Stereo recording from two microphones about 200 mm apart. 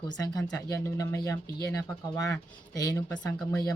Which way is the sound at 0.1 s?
20° left (ahead or behind).